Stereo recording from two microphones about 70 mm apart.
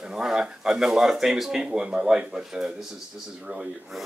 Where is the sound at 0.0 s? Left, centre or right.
Centre.